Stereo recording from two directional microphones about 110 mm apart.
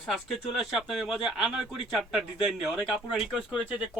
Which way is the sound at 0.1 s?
Centre (ahead or behind).